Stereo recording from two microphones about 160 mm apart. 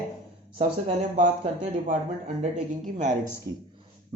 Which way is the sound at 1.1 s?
50° right (ahead or behind).